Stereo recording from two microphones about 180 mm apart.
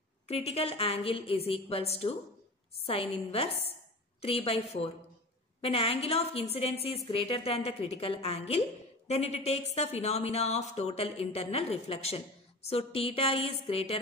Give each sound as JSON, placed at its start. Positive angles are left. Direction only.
{"t": 0.3, "sound": "a woman's voice", "side_deg": 35}